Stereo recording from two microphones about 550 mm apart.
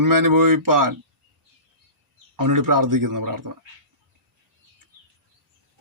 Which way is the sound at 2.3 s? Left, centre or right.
Right.